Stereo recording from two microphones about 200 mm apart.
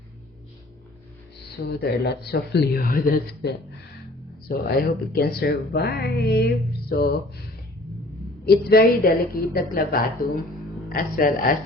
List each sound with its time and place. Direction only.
1.6 s speech: 55° left (ahead or behind)
8.4 s speech: 50° left (ahead or behind)